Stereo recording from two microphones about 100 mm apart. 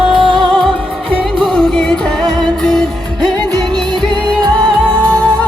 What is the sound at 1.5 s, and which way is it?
Music, 5° left (ahead or behind).